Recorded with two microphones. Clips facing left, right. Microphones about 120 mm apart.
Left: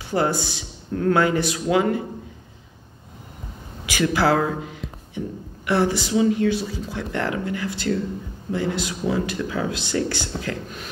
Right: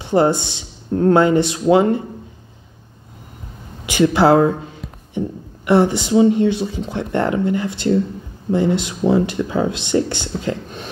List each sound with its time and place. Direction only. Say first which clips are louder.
0.0 s speech: right 7 dB; 25° right (ahead or behind)
3.9 s a sound: right 7 dB; 25° right (ahead or behind)
5.7 s speech: right 6 dB; 20° right (ahead or behind)